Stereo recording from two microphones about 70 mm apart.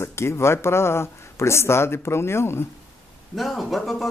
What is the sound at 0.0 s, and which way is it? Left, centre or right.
Speech, left.